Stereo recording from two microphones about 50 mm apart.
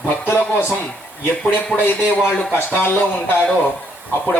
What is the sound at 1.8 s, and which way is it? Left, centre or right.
Speech, left.